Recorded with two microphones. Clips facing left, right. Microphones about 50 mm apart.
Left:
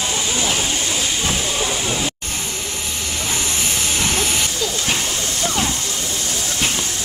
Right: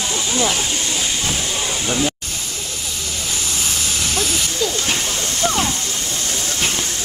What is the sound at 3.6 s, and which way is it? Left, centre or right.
Vehicle, left.